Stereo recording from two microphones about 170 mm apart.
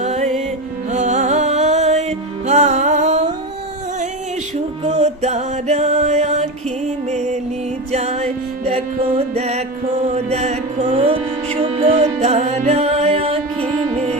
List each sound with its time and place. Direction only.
0.0 s music: 45° right (ahead or behind)
4.8 s music: 40° right (ahead or behind)